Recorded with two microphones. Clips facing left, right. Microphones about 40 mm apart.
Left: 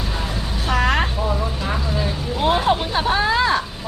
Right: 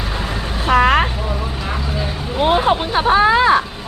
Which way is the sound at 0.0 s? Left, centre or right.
Right.